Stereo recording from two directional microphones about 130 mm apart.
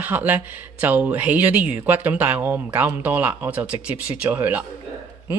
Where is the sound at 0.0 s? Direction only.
15° right (ahead or behind).